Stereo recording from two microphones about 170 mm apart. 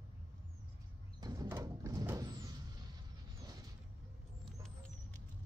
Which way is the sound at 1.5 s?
15° right (ahead or behind).